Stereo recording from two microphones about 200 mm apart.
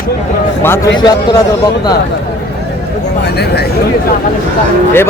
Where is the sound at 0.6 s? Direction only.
10° left (ahead or behind).